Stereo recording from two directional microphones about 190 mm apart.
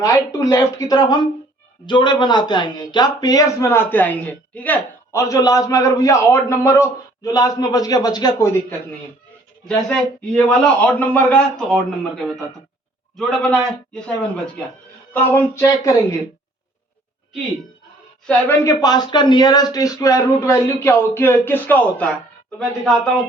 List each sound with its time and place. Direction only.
0.0 s speech: 20° left (ahead or behind)
9.6 s speech: 5° left (ahead or behind)
18.3 s speech: 10° left (ahead or behind)